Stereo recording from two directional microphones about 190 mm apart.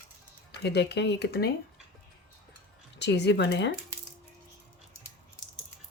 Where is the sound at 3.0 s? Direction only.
65° left (ahead or behind).